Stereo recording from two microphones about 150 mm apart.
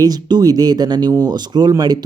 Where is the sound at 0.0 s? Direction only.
25° right (ahead or behind).